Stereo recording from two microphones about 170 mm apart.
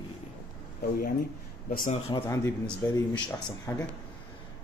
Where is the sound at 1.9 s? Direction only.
35° left (ahead or behind).